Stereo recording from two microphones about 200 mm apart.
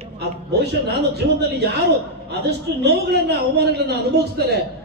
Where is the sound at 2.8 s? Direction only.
55° right (ahead or behind).